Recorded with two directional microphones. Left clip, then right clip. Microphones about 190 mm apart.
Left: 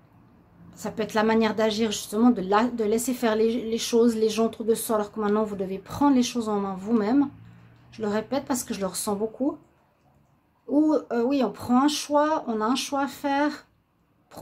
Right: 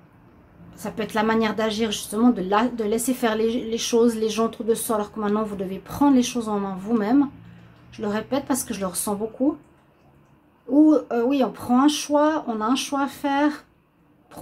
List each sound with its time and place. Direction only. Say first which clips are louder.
0.7 s a woman's voice: right 1 dB; 20° left (ahead or behind)
10.7 s a woman's voice: right 5 dB; 15° left (ahead or behind)